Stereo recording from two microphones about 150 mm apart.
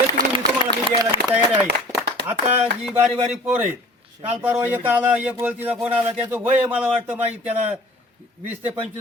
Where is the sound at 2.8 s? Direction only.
5° right (ahead or behind).